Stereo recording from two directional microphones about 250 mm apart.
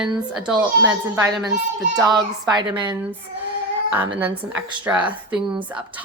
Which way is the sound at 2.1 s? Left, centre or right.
Centre.